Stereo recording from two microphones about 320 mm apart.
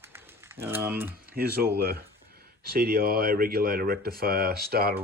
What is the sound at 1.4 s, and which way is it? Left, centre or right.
Speech, right.